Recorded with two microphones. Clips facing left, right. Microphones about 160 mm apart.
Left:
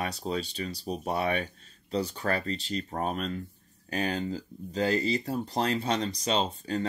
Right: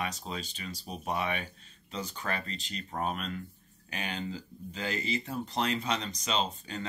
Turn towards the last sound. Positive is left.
turn(degrees=35)  # may be behind; listen again after turning